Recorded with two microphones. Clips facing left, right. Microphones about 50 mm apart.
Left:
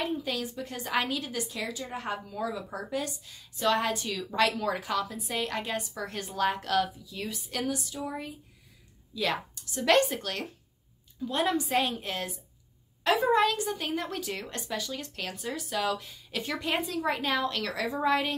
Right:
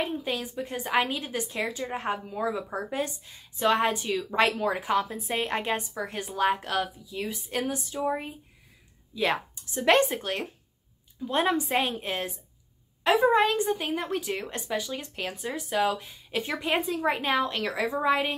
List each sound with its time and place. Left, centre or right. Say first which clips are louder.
0.0 s a woman's voice: right 1 dB; right
5.9 s a woman's voice: right 2 dB; centre
7.4 s a woman's voice: even; right